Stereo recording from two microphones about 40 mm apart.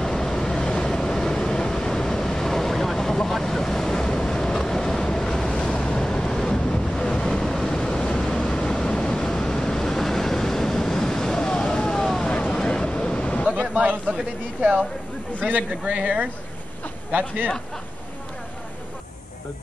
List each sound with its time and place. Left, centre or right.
0.0 s vehicle: centre; by 13.5 s left
13.6 s a sound: right
15.8 s speech: right